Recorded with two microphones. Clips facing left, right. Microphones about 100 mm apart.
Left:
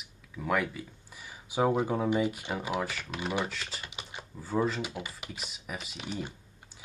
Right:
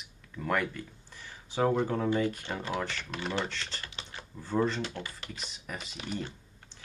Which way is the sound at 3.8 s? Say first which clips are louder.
Left 1 dB; 15° left (ahead or behind).